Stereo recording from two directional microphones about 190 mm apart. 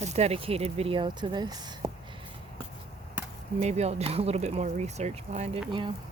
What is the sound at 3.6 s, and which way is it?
Speech, 35° right (ahead or behind).